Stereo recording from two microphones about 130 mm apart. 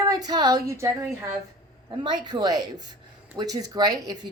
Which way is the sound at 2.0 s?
35° right (ahead or behind).